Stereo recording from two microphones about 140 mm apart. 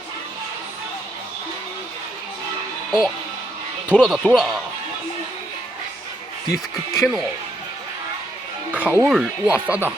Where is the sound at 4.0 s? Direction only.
5° right (ahead or behind).